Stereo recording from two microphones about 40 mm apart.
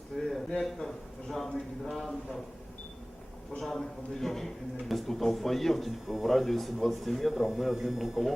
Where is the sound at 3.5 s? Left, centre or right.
Centre.